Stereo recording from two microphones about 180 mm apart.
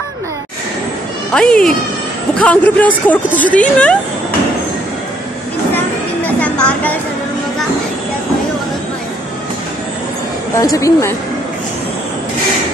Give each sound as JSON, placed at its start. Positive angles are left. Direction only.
{"t": 1.3, "sound": "speech", "side_deg": 5}
{"t": 6.2, "sound": "music", "side_deg": 10}
{"t": 10.6, "sound": "speech", "side_deg": 20}